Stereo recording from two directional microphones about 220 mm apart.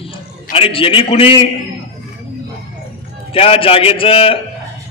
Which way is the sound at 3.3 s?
25° left (ahead or behind).